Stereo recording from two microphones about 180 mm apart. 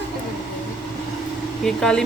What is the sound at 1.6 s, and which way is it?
Speech, 5° left (ahead or behind).